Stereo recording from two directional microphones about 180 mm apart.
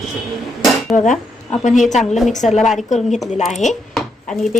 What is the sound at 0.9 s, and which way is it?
A woman's voice, 45° left (ahead or behind).